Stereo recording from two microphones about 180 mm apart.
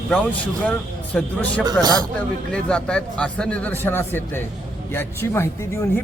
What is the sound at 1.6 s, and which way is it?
Speech, 20° right (ahead or behind).